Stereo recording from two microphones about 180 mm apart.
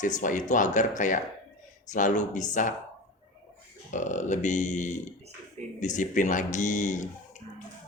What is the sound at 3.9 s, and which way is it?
Speech, 45° left (ahead or behind).